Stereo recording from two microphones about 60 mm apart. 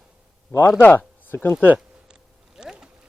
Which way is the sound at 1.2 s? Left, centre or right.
Left.